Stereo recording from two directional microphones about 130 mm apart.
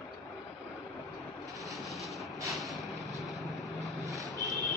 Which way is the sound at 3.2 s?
Centre (ahead or behind).